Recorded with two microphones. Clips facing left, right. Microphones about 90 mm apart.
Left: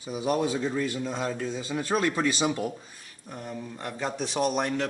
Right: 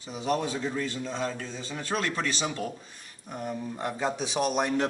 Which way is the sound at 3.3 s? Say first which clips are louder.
Right 3 dB; 15° right (ahead or behind).